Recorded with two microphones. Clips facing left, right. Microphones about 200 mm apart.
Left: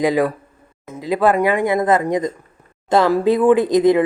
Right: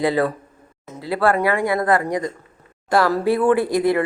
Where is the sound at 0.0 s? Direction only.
15° left (ahead or behind).